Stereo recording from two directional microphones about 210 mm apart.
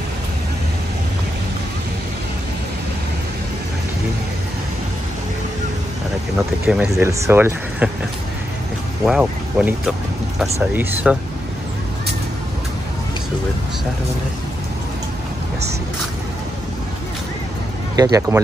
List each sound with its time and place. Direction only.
6.3 s speech: 5° right (ahead or behind)
9.0 s speech: 5° right (ahead or behind)
17.9 s speech: 15° right (ahead or behind)